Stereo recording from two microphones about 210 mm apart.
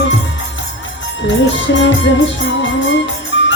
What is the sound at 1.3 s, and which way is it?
Music, 60° left (ahead or behind).